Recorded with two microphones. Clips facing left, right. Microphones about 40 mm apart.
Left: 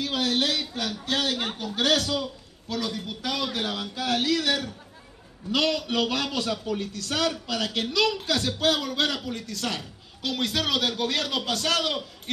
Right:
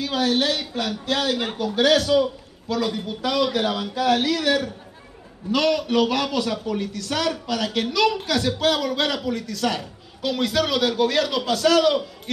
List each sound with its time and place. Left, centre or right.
0.0 s a man's voice: right